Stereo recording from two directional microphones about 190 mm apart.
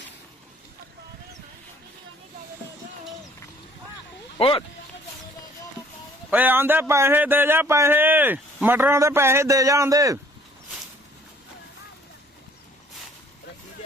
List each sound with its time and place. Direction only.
4.4 s speech: 30° left (ahead or behind)
6.3 s speech: 10° right (ahead or behind)